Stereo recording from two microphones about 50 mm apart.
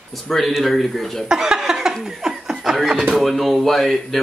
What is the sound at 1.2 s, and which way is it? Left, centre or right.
Chuckle, centre.